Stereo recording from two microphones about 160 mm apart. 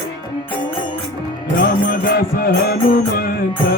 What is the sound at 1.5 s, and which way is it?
Music, 65° left (ahead or behind).